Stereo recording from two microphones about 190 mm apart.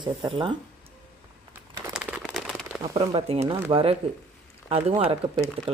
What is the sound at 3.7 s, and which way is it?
Speech, 30° right (ahead or behind).